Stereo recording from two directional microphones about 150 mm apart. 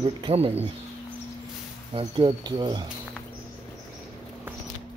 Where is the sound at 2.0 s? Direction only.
30° right (ahead or behind).